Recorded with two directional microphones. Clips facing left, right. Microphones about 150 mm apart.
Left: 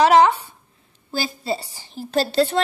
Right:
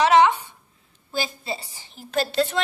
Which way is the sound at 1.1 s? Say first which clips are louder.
Left 4 dB; 35° left (ahead or behind).